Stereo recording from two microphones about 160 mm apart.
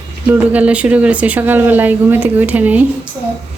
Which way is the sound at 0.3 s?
10° right (ahead or behind).